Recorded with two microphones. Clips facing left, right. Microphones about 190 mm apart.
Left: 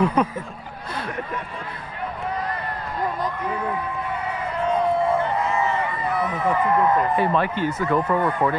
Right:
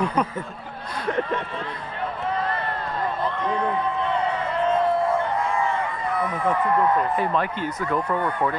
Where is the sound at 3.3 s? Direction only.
10° left (ahead or behind).